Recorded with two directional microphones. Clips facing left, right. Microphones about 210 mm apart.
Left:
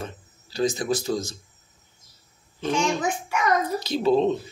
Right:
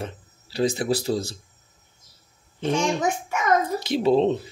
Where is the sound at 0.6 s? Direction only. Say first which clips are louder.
Right 1 dB; 30° right (ahead or behind).